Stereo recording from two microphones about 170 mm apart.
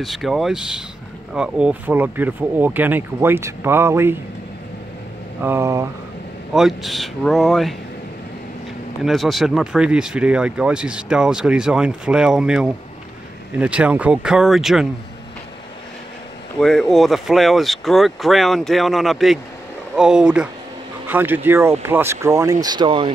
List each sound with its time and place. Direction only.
0.0 s speech: centre (ahead or behind)
5.4 s speech: 15° right (ahead or behind)
6.5 s speech: centre (ahead or behind)
9.0 s speech: centre (ahead or behind)
16.5 s speech: 5° left (ahead or behind); by 23.1 s 30° right (ahead or behind)